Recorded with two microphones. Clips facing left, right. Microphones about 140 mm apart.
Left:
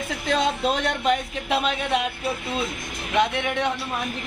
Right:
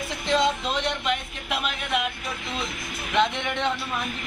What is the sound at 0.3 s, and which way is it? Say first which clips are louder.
Music: left 1 dB; 50° left (ahead or behind).